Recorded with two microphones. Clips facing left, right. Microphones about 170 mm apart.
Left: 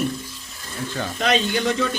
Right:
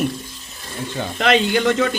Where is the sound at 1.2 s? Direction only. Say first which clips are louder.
Right 5 dB; 65° right (ahead or behind).